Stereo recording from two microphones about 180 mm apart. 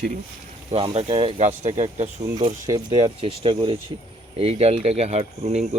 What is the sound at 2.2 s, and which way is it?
Speech, 25° right (ahead or behind).